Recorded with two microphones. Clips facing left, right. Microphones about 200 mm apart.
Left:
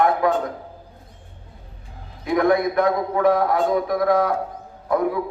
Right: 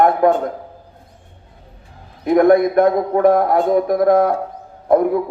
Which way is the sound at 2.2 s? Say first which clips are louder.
Right 7 dB; 50° right (ahead or behind).